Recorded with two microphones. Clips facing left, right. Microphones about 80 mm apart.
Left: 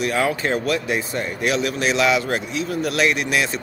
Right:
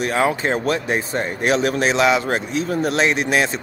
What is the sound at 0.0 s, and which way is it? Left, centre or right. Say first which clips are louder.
Speech: right 2 dB; right.